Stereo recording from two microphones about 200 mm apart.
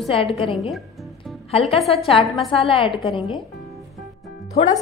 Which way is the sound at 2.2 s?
Centre (ahead or behind).